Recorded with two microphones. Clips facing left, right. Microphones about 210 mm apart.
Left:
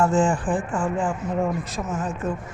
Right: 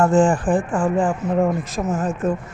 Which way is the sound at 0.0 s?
50° right (ahead or behind).